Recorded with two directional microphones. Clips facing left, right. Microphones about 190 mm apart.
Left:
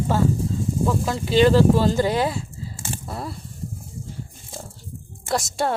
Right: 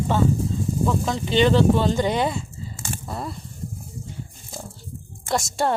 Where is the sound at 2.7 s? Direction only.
30° left (ahead or behind).